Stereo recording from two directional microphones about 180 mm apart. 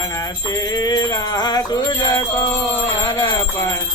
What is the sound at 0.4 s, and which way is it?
Music, 20° left (ahead or behind).